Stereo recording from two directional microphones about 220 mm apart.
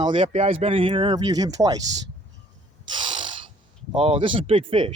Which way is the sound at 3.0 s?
20° right (ahead or behind).